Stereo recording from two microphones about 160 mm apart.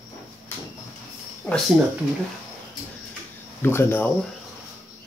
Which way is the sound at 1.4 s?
5° left (ahead or behind).